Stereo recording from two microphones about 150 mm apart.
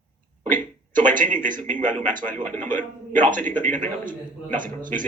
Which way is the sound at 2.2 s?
10° left (ahead or behind).